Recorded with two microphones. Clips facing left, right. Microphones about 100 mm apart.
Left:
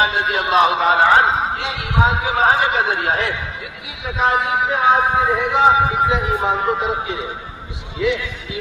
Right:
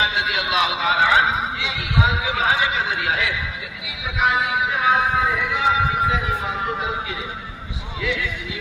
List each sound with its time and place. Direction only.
0.0 s a man's voice: 45° left (ahead or behind)